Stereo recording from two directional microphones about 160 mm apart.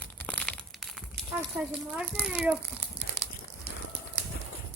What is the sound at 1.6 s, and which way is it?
Speech, 10° right (ahead or behind).